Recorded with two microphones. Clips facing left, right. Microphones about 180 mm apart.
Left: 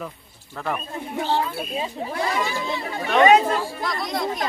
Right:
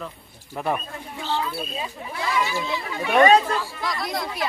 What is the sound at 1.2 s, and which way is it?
Speech, 55° left (ahead or behind).